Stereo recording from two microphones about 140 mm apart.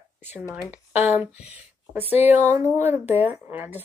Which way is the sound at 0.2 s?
15° right (ahead or behind).